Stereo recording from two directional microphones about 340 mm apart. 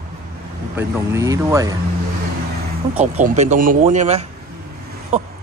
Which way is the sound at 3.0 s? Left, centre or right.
Right.